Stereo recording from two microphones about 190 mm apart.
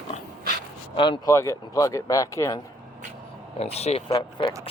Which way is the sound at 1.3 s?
15° left (ahead or behind).